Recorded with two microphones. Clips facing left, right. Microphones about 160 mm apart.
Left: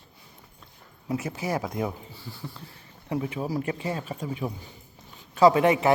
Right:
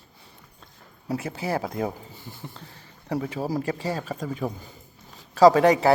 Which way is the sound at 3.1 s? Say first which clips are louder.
Right 2 dB; 40° right (ahead or behind).